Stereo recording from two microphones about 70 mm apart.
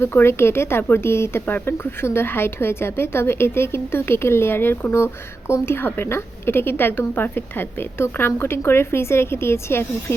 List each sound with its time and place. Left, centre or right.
0.0 s speech: left